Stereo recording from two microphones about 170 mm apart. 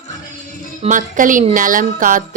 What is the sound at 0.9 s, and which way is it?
Speech, 50° right (ahead or behind).